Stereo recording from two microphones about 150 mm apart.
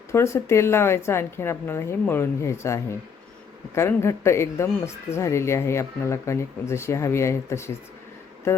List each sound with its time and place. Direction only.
0.1 s a woman's voice: 20° left (ahead or behind)